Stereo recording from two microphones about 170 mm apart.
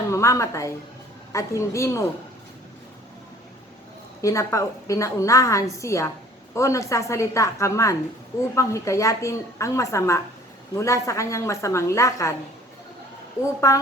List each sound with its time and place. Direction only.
0.1 s a woman's voice: 15° left (ahead or behind)
4.2 s a woman's voice: 20° left (ahead or behind)
13.6 s a woman's voice: 20° left (ahead or behind)